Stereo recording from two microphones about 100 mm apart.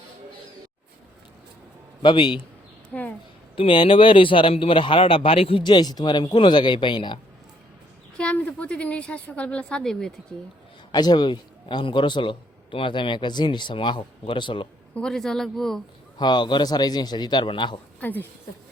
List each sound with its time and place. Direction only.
2.0 s a man's voice: 50° left (ahead or behind)
2.9 s a sound: 15° left (ahead or behind)
3.5 s a man's voice: 60° left (ahead or behind)
8.2 s a woman's voice: 10° left (ahead or behind)
10.9 s a man's voice: 45° left (ahead or behind)
14.9 s speech: 5° left (ahead or behind)
16.1 s a man's voice: 45° left (ahead or behind)
18.0 s speech: 20° left (ahead or behind)